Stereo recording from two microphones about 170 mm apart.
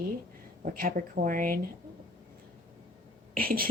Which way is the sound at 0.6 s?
55° right (ahead or behind).